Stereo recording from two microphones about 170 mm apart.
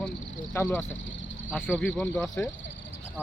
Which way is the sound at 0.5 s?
10° left (ahead or behind).